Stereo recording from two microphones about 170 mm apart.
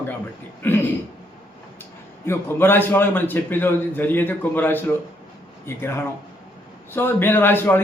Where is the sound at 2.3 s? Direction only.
15° left (ahead or behind).